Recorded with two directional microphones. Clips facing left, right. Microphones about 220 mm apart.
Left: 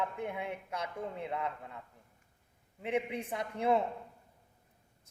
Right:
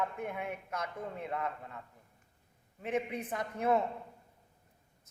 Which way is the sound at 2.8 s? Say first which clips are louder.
Left 1 dB; 15° left (ahead or behind).